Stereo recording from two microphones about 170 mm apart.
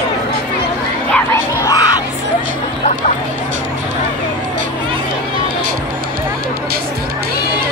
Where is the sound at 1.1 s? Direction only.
15° left (ahead or behind).